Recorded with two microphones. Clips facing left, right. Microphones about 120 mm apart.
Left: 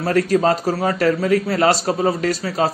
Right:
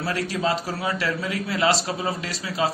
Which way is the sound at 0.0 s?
45° left (ahead or behind).